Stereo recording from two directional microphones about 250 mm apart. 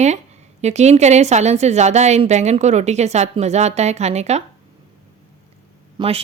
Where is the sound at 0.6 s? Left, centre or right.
Right.